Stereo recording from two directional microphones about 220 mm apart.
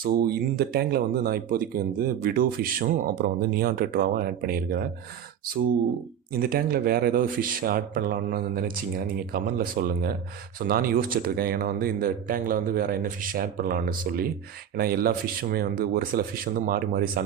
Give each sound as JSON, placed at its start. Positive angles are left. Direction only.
{"t": 0.0, "sound": "speech", "side_deg": -45}
{"t": 6.3, "sound": "a man's voice", "side_deg": -45}